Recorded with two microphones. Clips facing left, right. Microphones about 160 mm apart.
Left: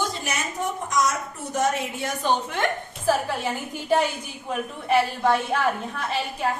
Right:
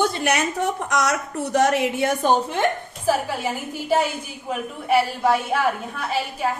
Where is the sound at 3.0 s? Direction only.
5° right (ahead or behind).